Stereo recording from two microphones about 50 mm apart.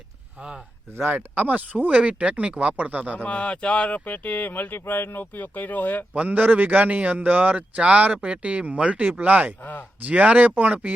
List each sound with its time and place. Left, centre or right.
0.9 s speech: right
3.2 s speech: left
6.1 s speech: right